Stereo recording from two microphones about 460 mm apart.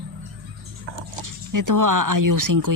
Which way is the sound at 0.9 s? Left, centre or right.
Right.